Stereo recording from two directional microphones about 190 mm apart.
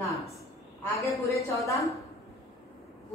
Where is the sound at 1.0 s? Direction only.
15° left (ahead or behind).